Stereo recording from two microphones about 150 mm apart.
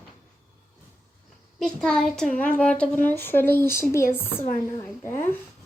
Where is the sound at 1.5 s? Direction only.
5° left (ahead or behind).